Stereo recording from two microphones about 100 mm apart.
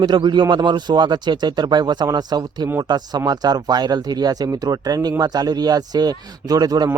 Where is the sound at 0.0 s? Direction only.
45° right (ahead or behind).